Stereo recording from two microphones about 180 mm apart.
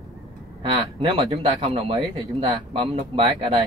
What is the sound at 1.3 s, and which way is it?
A man's voice, 30° right (ahead or behind).